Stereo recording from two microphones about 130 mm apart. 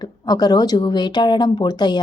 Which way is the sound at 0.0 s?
30° left (ahead or behind).